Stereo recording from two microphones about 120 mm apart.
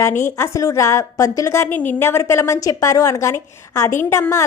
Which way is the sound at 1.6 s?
15° left (ahead or behind).